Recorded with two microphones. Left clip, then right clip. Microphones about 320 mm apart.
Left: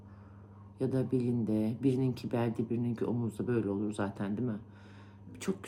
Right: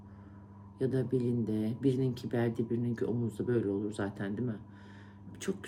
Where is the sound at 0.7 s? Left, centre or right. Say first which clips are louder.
Even; centre.